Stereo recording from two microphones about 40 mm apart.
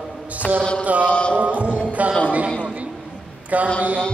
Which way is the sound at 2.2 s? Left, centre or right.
Right.